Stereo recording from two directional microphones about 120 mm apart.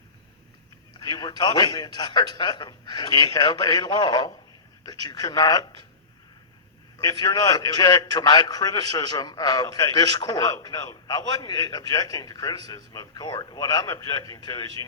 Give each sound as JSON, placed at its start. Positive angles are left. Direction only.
{"t": 0.9, "sound": "a man's voice", "side_deg": 35}
{"t": 7.0, "sound": "a man's voice", "side_deg": 30}